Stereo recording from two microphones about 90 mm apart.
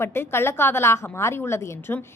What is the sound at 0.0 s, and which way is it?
A woman's voice, 25° left (ahead or behind).